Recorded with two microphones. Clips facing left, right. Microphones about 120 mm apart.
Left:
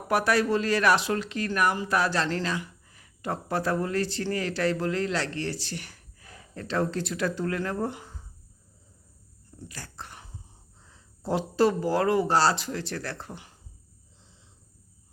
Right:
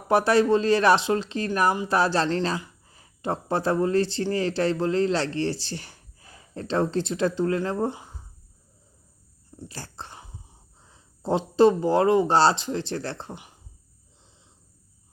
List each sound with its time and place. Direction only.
0.1 s speech: 25° right (ahead or behind)
9.6 s dog: 30° right (ahead or behind)
10.8 s speech: 20° right (ahead or behind)